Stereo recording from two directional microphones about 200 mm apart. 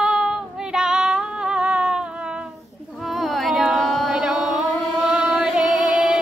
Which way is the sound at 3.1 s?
Centre (ahead or behind).